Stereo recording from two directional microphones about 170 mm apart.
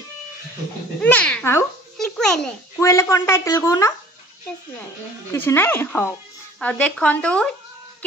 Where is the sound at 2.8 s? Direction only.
15° left (ahead or behind).